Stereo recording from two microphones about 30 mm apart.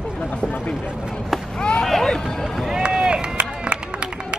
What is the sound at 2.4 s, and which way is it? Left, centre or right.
Speech, centre.